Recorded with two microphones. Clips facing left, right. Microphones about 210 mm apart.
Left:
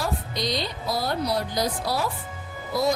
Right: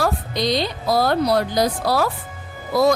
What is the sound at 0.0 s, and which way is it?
A woman's voice, 90° right.